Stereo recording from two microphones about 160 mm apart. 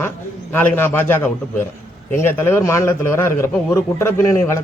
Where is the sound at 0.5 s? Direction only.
10° left (ahead or behind).